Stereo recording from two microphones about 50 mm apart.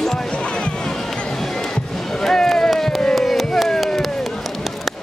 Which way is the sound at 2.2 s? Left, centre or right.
Centre.